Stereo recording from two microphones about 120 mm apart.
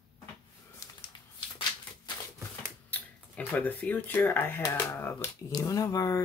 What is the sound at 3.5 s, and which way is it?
Speech, 15° left (ahead or behind).